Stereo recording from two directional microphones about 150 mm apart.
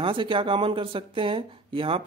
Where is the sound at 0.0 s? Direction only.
35° right (ahead or behind).